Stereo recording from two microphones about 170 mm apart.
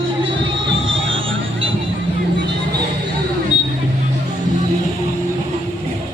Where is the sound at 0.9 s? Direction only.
90° right.